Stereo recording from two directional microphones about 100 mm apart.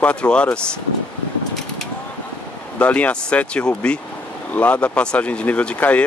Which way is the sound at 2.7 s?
15° left (ahead or behind).